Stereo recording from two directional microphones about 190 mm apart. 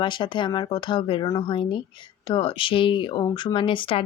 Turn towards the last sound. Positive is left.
turn(degrees=25)  # may be behind; listen again after turning